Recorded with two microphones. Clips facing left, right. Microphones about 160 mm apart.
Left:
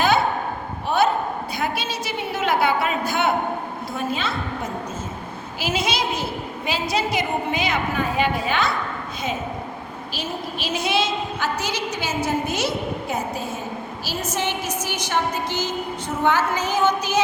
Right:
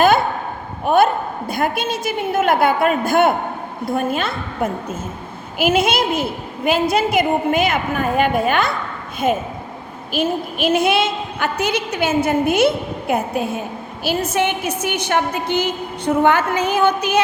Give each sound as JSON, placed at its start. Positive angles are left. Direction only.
{"t": 0.9, "sound": "a woman's voice", "side_deg": -50}